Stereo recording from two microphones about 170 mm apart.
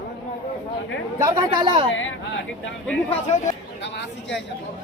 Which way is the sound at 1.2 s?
20° right (ahead or behind).